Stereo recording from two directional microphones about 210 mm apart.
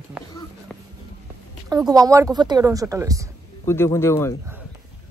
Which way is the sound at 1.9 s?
15° right (ahead or behind).